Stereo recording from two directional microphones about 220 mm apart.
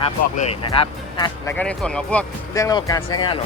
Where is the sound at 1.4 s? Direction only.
5° left (ahead or behind).